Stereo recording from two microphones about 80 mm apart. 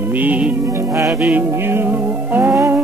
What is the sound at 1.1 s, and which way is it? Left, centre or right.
Music, centre.